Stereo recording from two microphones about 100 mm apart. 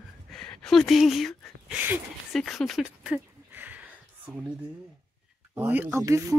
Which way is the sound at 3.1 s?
20° right (ahead or behind).